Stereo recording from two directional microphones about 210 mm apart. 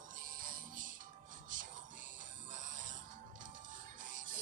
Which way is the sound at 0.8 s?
40° right (ahead or behind).